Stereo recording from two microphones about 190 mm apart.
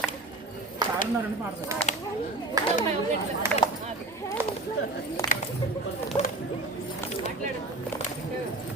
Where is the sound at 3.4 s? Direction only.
15° right (ahead or behind).